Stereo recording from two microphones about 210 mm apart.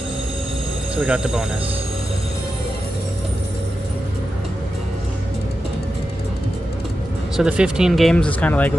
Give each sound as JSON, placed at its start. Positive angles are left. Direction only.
{"t": 0.9, "sound": "speech", "side_deg": -5}
{"t": 7.3, "sound": "speech", "side_deg": -5}